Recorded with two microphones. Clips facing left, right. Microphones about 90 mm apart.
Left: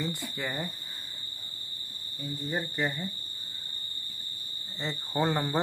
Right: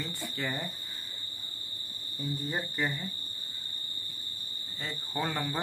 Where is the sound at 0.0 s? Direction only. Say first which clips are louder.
Left 2 dB; 15° left (ahead or behind).